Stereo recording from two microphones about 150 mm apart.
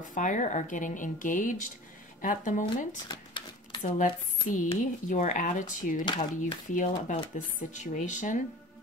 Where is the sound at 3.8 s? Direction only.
55° left (ahead or behind).